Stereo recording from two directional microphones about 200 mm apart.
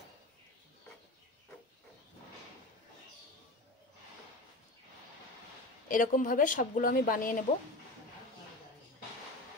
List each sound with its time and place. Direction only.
5.9 s a woman's voice: 40° left (ahead or behind)